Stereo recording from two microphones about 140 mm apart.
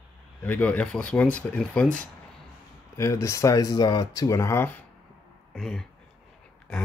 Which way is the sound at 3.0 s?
20° left (ahead or behind).